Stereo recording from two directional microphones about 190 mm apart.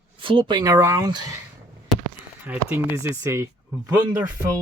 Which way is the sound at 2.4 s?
10° right (ahead or behind).